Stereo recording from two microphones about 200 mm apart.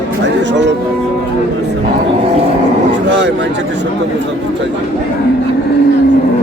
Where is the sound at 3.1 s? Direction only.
65° right (ahead or behind).